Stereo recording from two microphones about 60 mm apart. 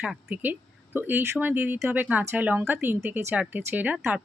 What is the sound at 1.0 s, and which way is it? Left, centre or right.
Speech, right.